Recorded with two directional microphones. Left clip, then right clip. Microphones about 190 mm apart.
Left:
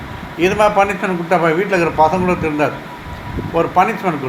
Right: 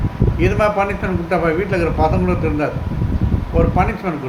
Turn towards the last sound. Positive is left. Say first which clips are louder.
# left 4 dB
turn(degrees=0)  # may be behind; listen again after turning